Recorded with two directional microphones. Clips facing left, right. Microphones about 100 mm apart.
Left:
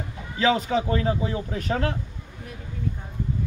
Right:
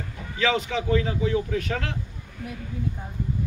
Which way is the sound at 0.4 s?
35° left (ahead or behind).